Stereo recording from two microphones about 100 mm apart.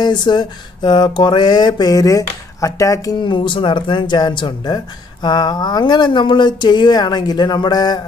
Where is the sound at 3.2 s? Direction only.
55° left (ahead or behind).